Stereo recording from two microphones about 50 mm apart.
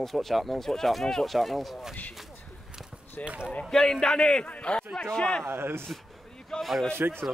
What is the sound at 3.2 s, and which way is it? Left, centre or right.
Speech, left.